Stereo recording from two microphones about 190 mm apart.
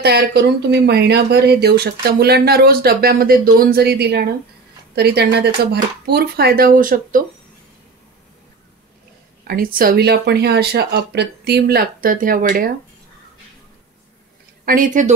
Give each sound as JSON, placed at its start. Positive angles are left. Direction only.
{"t": 0.0, "sound": "speech", "side_deg": -60}
{"t": 9.5, "sound": "speech", "side_deg": -50}
{"t": 14.6, "sound": "a woman's voice", "side_deg": -45}